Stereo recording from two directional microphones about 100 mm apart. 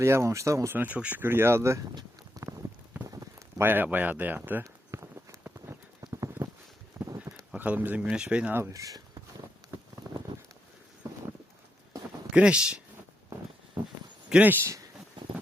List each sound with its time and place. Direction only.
0.0 s speech: 30° right (ahead or behind)
0.8 s speech: 15° right (ahead or behind); by 1.9 s 30° right (ahead or behind)
2.0 s a sound: 35° right (ahead or behind)
3.6 s speech: 20° right (ahead or behind)
4.6 s a sound: 25° right (ahead or behind)
6.0 s clip-clop: 40° right (ahead or behind)
7.0 s a sound: 15° right (ahead or behind)
7.5 s speech: 15° right (ahead or behind)
8.5 s speech: 30° right (ahead or behind)
11.0 s a sound: 35° right (ahead or behind)
12.3 s speech: 10° right (ahead or behind)
14.3 s speech: 15° right (ahead or behind)